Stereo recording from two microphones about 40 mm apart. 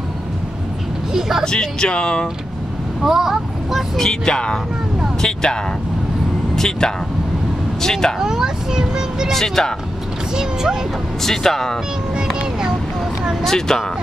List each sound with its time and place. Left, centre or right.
1.4 s speech: centre
3.0 s speech: centre
4.0 s speech: centre
8.2 s speech: centre
9.3 s speech: centre
10.3 s speech: centre
11.2 s speech: centre
13.4 s speech: centre